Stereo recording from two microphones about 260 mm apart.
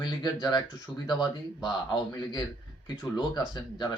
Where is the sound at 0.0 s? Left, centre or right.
Centre.